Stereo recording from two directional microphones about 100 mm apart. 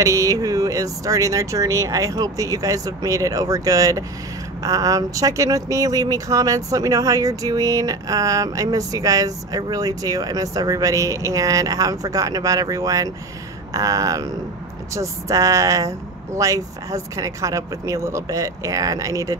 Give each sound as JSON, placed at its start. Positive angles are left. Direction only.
{"t": 0.0, "sound": "speech", "side_deg": -35}